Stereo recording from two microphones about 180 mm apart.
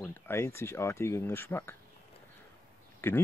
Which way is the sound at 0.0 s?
15° left (ahead or behind).